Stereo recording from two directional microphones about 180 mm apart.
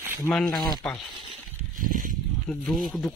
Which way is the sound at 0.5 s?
20° left (ahead or behind).